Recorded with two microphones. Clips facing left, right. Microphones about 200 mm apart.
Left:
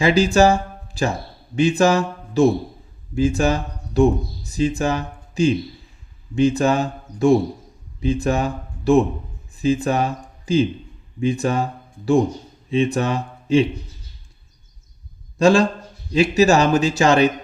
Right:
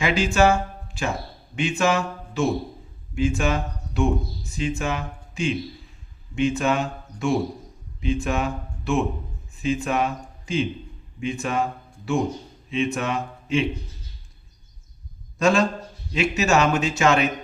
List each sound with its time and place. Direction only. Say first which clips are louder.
0.0 s a man's voice: left 5 dB; 35° left (ahead or behind)
15.4 s a man's voice: left 5 dB; 30° left (ahead or behind)